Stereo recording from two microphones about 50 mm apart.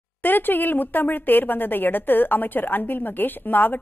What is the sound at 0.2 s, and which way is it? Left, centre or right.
A woman's voice, left.